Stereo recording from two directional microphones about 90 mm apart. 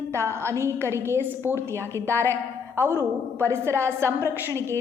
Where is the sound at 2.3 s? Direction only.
25° right (ahead or behind).